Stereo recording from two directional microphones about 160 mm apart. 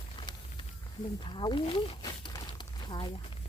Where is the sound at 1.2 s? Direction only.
30° left (ahead or behind).